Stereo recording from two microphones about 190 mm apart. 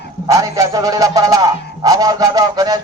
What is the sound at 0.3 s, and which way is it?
A man's voice, 15° right (ahead or behind).